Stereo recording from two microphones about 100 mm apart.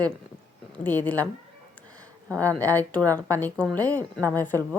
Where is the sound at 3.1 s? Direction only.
35° right (ahead or behind).